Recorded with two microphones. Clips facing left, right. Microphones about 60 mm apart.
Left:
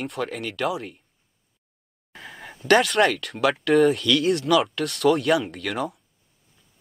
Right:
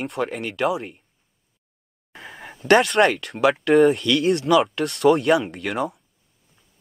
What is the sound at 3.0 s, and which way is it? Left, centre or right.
Speech, centre.